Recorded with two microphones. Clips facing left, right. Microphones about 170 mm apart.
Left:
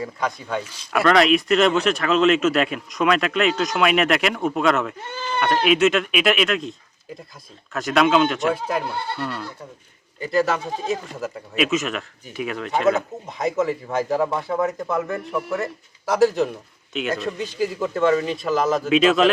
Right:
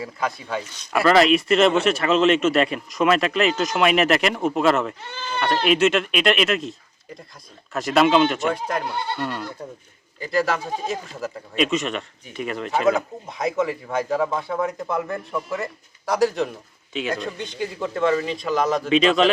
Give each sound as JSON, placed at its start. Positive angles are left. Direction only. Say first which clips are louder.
{"t": 0.0, "sound": "speech", "louder": "left 1 dB", "side_deg": -5}
{"t": 5.0, "sound": "speech", "louder": "left 3 dB", "side_deg": 50}
{"t": 5.6, "sound": "speech", "louder": "even", "side_deg": 0}
{"t": 10.2, "sound": "speech", "louder": "left 2 dB", "side_deg": 0}